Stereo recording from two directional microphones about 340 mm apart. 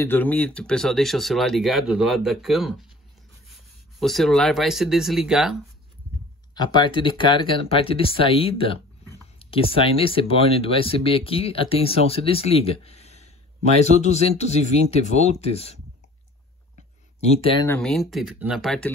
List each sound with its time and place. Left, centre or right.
0.0 s speech: centre
6.5 s speech: centre
17.2 s speech: centre
17.6 s speech: centre